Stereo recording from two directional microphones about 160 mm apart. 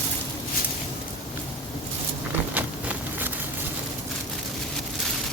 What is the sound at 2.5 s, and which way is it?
Insect, 10° right (ahead or behind).